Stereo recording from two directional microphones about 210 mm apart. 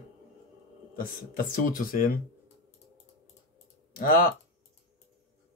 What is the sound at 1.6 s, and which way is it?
Speech, 40° left (ahead or behind).